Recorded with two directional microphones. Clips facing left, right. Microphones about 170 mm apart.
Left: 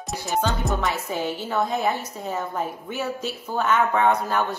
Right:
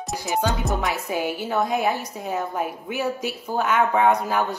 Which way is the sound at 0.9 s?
10° right (ahead or behind).